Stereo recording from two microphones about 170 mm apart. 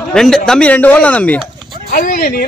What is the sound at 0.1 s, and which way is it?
Speech, 5° left (ahead or behind).